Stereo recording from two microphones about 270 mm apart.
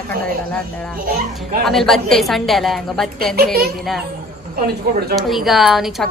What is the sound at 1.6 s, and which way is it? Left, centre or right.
A woman's voice, centre.